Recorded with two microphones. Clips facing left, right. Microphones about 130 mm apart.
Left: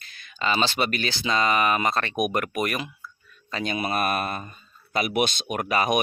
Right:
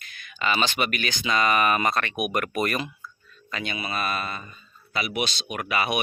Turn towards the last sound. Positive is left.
turn(degrees=40)  # may be behind; listen again after turning